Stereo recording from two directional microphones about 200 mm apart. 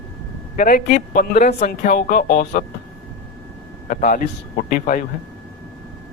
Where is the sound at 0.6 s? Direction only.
40° left (ahead or behind).